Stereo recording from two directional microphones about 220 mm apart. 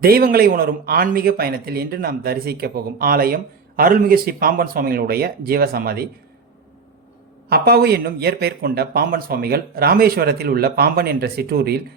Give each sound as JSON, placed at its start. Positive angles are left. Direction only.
{"t": 0.0, "sound": "a man's voice", "side_deg": -45}
{"t": 7.5, "sound": "a man's voice", "side_deg": -45}